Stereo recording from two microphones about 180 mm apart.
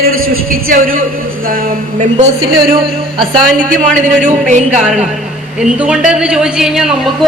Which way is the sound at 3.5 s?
50° right (ahead or behind).